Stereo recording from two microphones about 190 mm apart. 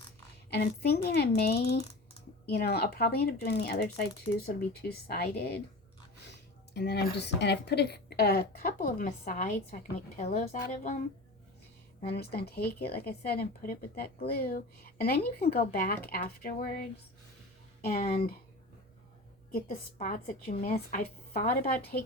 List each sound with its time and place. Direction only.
0.5 s speech: 55° left (ahead or behind)
6.7 s a woman's voice: 60° left (ahead or behind); by 10.6 s 40° left (ahead or behind)
12.0 s a woman's voice: 55° left (ahead or behind)
17.8 s a woman's voice: 50° left (ahead or behind)
19.5 s a woman's voice: 45° left (ahead or behind)